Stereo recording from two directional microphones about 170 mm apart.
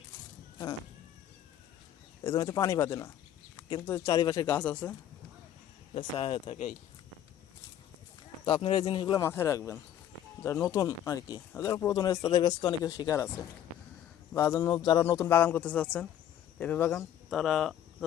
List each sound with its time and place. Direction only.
2.2 s speech: 20° left (ahead or behind)
4.5 s speech: 10° left (ahead or behind)
5.9 s speech: 30° left (ahead or behind)
8.4 s speech: 30° left (ahead or behind); by 17.0 s 10° left (ahead or behind)
17.2 s speech: centre (ahead or behind)